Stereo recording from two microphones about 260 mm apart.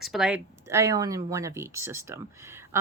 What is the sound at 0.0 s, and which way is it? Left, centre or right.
A woman's voice, centre.